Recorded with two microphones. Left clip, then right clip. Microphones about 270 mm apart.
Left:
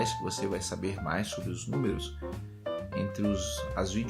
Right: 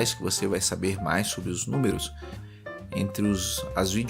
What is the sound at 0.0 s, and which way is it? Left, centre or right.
Speech, right.